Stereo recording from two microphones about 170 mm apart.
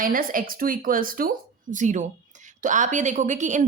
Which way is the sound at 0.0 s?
55° right (ahead or behind).